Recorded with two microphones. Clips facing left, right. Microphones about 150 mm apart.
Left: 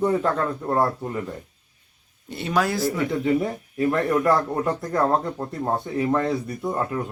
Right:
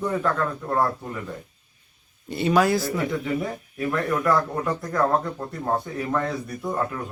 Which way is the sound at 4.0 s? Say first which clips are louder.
Even; 20° left (ahead or behind).